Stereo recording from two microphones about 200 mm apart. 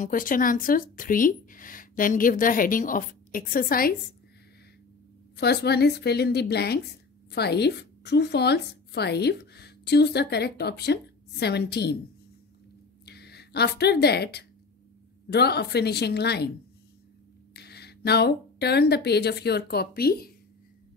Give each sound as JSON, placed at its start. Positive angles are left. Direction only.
{"t": 0.0, "sound": "speech", "side_deg": 45}
{"t": 5.3, "sound": "a woman's voice", "side_deg": 55}
{"t": 13.0, "sound": "a woman's voice", "side_deg": 55}
{"t": 17.6, "sound": "speech", "side_deg": 55}